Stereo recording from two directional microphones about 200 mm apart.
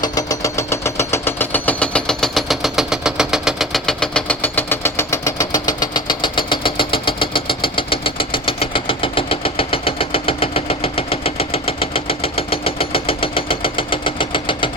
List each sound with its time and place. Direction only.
0.0 s engine: 20° left (ahead or behind)